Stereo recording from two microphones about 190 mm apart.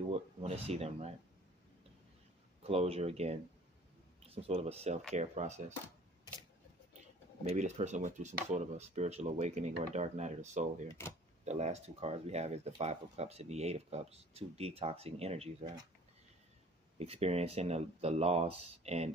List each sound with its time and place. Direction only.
0.1 s speech: 35° right (ahead or behind)
2.6 s speech: 30° right (ahead or behind)
7.4 s speech: 35° right (ahead or behind)
17.0 s speech: 35° right (ahead or behind)